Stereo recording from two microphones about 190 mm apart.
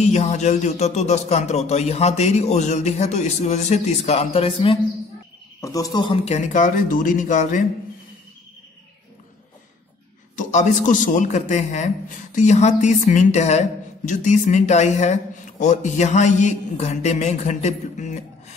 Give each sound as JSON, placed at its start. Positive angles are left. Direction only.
{"t": 0.0, "sound": "a man's voice", "side_deg": 35}
{"t": 5.6, "sound": "speech", "side_deg": 20}
{"t": 6.2, "sound": "a man's voice", "side_deg": 40}
{"t": 10.3, "sound": "a man's voice", "side_deg": 40}